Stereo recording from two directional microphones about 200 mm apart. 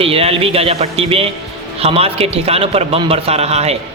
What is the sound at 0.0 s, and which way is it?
A man's voice, 30° right (ahead or behind).